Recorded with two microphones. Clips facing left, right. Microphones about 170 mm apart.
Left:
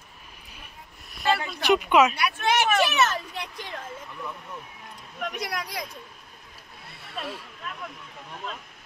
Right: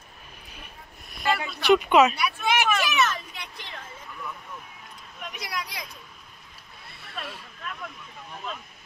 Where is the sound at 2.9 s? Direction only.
35° left (ahead or behind).